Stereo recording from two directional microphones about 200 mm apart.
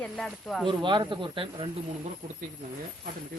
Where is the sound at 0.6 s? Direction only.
25° right (ahead or behind).